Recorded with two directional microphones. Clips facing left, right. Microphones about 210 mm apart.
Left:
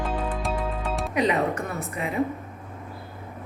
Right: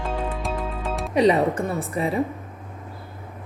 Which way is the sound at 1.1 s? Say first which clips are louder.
Right 6 dB; 30° right (ahead or behind).